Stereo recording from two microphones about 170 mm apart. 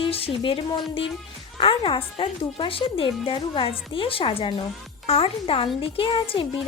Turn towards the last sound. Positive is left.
turn(degrees=30)  # may be behind; listen again after turning